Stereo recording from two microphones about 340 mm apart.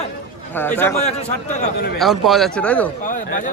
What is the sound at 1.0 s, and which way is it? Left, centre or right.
Speech, centre.